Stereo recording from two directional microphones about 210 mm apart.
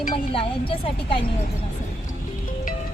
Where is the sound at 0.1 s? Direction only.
25° left (ahead or behind).